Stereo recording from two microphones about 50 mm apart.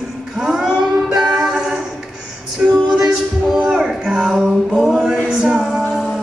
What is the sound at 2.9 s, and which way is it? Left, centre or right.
Music, centre.